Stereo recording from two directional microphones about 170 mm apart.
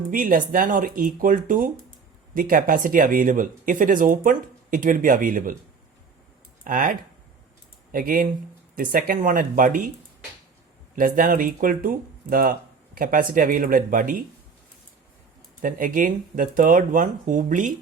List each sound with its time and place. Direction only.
0.1 s speech: 55° right (ahead or behind)
6.7 s speech: 55° right (ahead or behind)
7.9 s speech: 55° right (ahead or behind)
10.9 s speech: 55° right (ahead or behind)
15.6 s speech: 50° right (ahead or behind)